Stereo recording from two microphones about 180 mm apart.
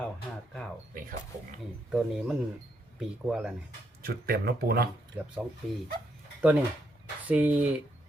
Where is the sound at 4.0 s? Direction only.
60° right (ahead or behind).